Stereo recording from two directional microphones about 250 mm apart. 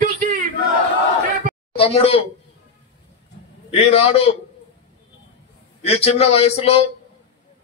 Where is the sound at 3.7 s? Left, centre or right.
Left.